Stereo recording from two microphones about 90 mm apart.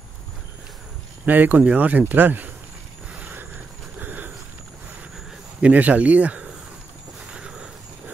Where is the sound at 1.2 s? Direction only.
20° right (ahead or behind).